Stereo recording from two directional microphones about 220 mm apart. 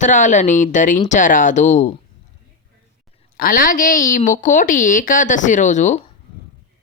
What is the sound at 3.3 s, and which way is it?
Speech, 40° left (ahead or behind).